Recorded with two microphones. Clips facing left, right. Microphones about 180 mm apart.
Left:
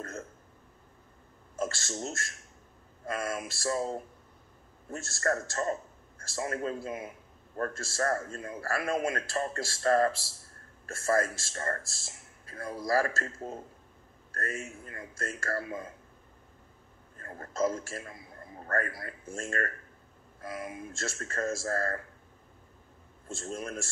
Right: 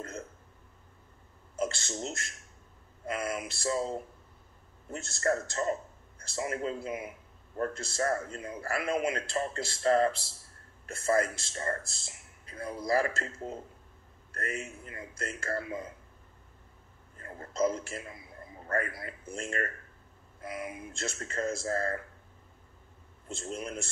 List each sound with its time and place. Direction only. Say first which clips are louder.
1.6 s a man's voice: right 1 dB; 20° right (ahead or behind)
17.2 s speech: right 1 dB; 20° right (ahead or behind)
23.2 s speech: even; 20° right (ahead or behind)